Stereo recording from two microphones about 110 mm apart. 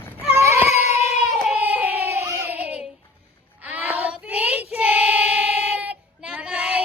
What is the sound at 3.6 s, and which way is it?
Child singing, 15° right (ahead or behind).